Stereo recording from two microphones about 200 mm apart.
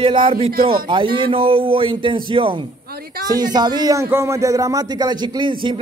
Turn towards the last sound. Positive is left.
turn(degrees=-25)  # may be behind; listen again after turning